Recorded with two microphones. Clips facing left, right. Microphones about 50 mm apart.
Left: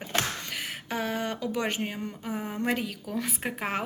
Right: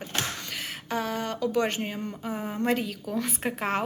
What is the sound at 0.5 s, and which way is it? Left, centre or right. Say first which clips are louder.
A woman's voice: right 2 dB; centre.